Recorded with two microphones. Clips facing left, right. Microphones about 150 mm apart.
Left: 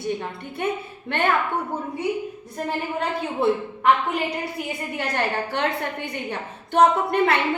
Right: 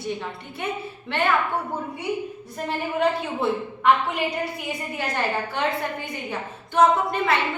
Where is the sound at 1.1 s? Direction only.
55° left (ahead or behind).